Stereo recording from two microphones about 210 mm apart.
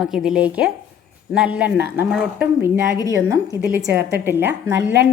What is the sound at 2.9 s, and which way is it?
Speech, 15° left (ahead or behind).